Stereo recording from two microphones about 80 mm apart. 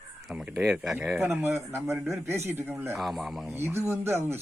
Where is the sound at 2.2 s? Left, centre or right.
Right.